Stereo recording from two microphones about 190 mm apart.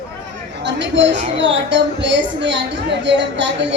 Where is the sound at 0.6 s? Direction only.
70° right (ahead or behind).